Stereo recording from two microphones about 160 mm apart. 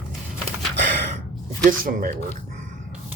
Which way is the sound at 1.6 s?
60° right (ahead or behind).